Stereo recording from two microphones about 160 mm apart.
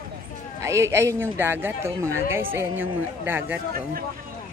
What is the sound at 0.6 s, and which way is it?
Speech, 20° right (ahead or behind).